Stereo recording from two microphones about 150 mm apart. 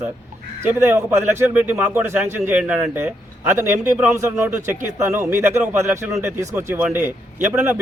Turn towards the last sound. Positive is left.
turn(degrees=-15)  # may be behind; listen again after turning